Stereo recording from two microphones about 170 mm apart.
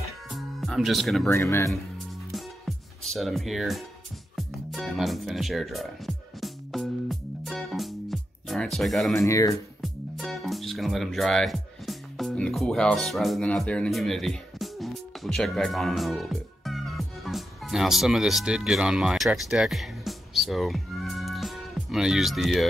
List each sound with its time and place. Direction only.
0.3 s music: centre (ahead or behind)
1.3 s speech: 15° left (ahead or behind)
2.3 s music: centre (ahead or behind)
9.1 s speech: 15° left (ahead or behind)
9.8 s music: centre (ahead or behind)